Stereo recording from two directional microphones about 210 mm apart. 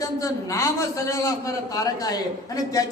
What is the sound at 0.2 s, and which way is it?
A man's voice, 15° left (ahead or behind).